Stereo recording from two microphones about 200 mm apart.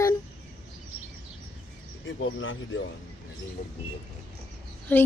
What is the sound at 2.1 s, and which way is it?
Speech, 70° left (ahead or behind).